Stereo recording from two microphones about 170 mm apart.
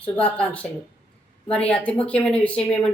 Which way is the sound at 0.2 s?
5° left (ahead or behind).